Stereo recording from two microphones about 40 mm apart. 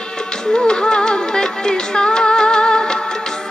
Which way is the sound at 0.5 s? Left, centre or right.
Centre.